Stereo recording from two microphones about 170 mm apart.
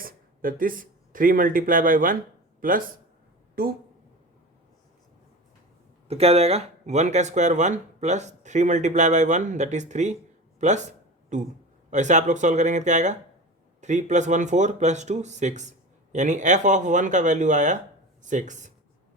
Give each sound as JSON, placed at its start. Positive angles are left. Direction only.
{"t": 0.0, "sound": "speech", "side_deg": -55}
{"t": 6.1, "sound": "speech", "side_deg": -35}